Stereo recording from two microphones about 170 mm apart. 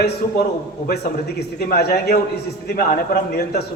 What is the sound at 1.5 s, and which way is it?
A man's voice, 65° left (ahead or behind).